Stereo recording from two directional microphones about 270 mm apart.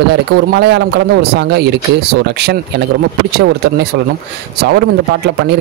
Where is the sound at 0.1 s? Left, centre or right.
Right.